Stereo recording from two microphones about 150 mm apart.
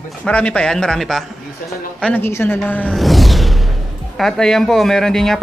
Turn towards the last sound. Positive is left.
turn(degrees=5)  # may be behind; listen again after turning